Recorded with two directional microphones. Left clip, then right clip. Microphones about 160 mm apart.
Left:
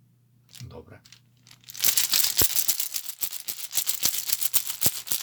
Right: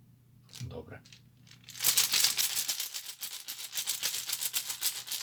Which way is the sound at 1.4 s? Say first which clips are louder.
Left 4 dB; 90° left.